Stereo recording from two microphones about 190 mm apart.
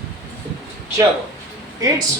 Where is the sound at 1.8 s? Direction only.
20° right (ahead or behind).